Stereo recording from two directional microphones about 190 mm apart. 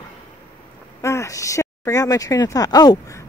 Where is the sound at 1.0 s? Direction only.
15° left (ahead or behind).